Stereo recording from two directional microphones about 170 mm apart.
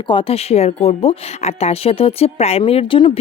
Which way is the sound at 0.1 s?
35° left (ahead or behind).